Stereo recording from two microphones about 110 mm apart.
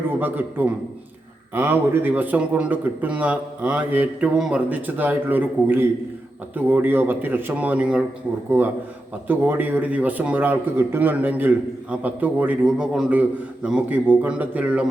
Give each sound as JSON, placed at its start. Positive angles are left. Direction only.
{"t": 0.1, "sound": "a man's voice", "side_deg": -15}